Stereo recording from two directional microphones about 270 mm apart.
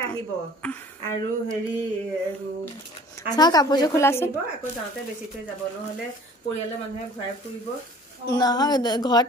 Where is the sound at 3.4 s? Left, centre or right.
Centre.